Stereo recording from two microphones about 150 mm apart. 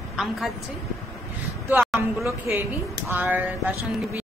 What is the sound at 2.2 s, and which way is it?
A man's voice, 15° right (ahead or behind).